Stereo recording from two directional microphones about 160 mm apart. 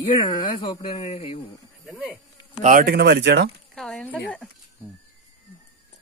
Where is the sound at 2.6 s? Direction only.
50° right (ahead or behind).